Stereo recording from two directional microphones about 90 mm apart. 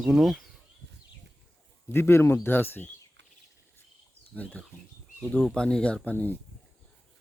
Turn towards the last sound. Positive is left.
turn(degrees=20)  # may be behind; listen again after turning